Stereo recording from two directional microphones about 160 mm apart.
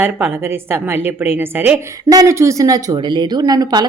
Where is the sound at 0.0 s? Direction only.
10° right (ahead or behind).